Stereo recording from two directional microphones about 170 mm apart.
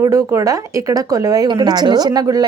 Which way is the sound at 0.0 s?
20° right (ahead or behind).